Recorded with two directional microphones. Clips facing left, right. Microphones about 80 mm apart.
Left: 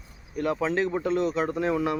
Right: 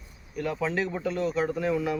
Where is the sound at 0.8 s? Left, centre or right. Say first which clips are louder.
Left 3 dB; left.